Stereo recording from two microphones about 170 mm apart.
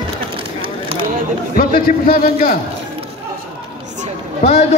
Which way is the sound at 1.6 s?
60° left (ahead or behind).